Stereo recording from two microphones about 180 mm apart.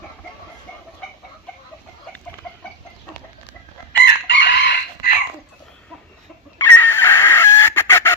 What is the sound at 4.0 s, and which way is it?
Crowing, 70° left (ahead or behind).